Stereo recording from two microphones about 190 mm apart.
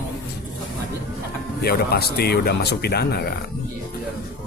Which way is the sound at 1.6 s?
55° left (ahead or behind).